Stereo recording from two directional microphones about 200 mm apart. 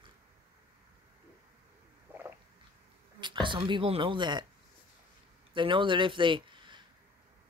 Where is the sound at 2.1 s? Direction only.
10° right (ahead or behind).